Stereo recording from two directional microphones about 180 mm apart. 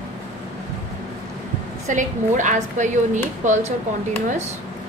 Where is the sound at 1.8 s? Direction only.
45° right (ahead or behind).